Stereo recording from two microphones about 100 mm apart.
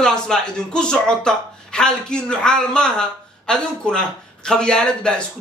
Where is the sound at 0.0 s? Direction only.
5° left (ahead or behind).